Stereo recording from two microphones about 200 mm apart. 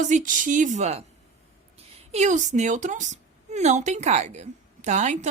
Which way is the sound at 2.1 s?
35° right (ahead or behind).